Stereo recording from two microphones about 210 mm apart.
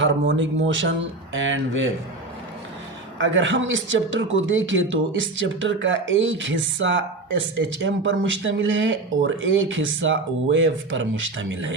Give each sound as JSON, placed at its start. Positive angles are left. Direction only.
{"t": 0.0, "sound": "speech", "side_deg": -60}
{"t": 3.2, "sound": "speech", "side_deg": -65}